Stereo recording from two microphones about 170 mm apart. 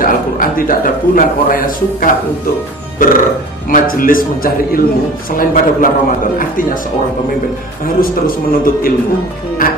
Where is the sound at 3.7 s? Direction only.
55° left (ahead or behind).